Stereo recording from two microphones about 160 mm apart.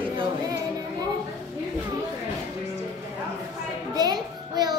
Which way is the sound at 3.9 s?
25° right (ahead or behind).